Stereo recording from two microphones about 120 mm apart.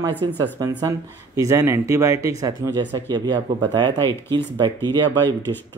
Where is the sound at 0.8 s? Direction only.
25° right (ahead or behind).